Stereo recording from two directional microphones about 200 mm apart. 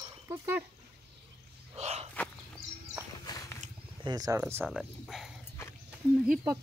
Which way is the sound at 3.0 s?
10° right (ahead or behind).